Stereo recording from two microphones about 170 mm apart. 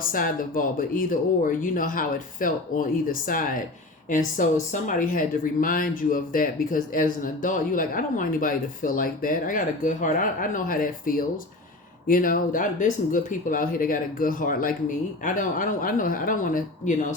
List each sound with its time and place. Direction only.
0.1 s speech: 55° left (ahead or behind)